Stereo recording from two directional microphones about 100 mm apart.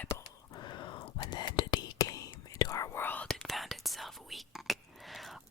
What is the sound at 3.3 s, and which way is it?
Speech, centre (ahead or behind).